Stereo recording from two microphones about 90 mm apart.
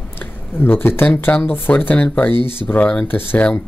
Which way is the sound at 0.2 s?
25° left (ahead or behind).